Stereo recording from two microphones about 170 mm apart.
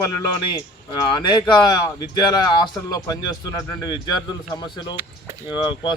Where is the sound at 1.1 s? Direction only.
25° left (ahead or behind).